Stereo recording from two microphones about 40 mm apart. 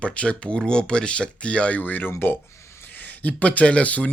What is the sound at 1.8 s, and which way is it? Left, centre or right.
Speech, left.